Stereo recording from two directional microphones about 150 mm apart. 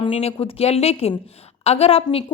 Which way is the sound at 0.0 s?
40° left (ahead or behind).